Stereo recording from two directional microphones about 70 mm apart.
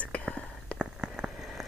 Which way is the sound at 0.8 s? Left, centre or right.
Centre.